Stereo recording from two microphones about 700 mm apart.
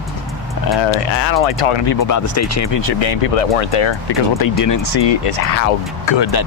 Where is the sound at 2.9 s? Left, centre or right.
Left.